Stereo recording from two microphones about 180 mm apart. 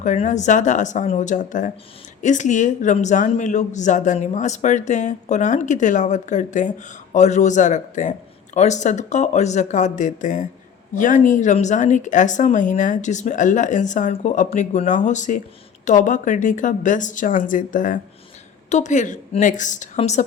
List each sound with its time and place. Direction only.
0.0 s speech: 45° left (ahead or behind)